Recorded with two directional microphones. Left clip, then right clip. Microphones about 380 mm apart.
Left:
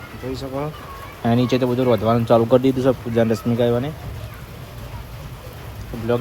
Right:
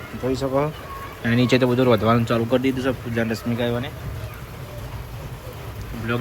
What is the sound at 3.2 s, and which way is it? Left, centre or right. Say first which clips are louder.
Speech: left 6 dB; right.